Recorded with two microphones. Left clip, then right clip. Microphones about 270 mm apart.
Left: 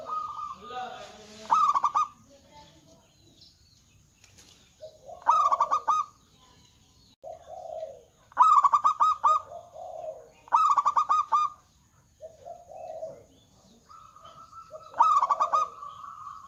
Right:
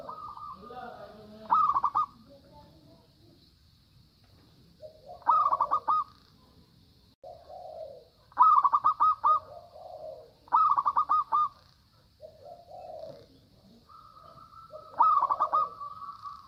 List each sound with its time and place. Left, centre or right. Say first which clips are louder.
1.5 s bird: left 2 dB; centre
5.2 s bird: left 2 dB; centre
8.4 s goose: left 2 dB; centre
10.5 s bird: left 2 dB; centre
14.9 s bird: left 2 dB; centre